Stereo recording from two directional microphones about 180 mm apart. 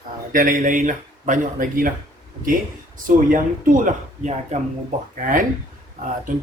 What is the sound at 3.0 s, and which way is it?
Speech, 50° right (ahead or behind).